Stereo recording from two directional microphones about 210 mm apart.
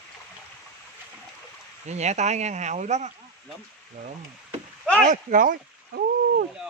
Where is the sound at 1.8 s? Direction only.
35° right (ahead or behind).